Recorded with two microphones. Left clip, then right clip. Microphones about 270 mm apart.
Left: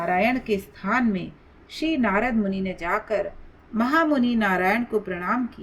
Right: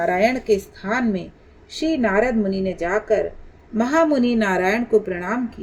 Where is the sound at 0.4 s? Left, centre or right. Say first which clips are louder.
Right 6 dB; left.